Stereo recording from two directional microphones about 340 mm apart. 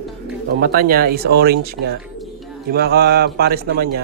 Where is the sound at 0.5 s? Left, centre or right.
Right.